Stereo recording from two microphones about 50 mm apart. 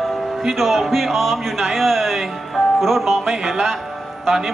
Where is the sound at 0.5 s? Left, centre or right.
Centre.